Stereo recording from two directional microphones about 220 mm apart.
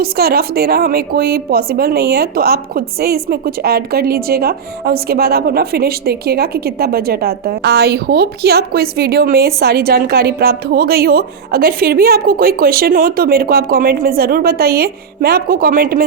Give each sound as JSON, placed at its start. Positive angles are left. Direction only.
{"t": 0.0, "sound": "a woman's voice", "side_deg": -45}